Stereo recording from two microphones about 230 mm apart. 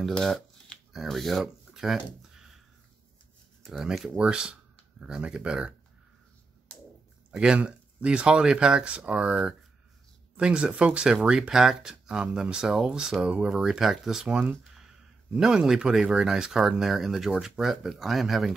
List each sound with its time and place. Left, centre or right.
0.0 s shuffling cards: centre
3.6 s speech: centre
7.3 s speech: centre